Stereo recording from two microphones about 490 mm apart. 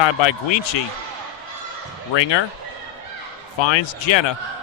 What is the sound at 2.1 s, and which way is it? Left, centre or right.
Speech, left.